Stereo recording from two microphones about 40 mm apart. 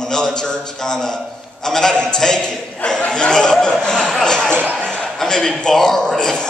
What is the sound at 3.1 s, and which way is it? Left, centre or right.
A man's voice, centre.